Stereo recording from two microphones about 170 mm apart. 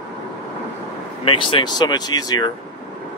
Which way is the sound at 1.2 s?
30° left (ahead or behind).